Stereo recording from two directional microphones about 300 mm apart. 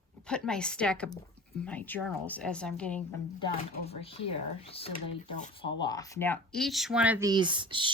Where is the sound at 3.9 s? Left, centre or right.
Centre.